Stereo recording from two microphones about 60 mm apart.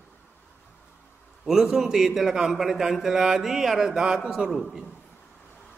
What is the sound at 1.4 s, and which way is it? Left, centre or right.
A man's voice, centre.